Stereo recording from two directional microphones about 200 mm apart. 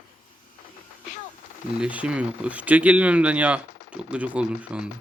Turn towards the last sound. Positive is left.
turn(degrees=-5)  # may be behind; listen again after turning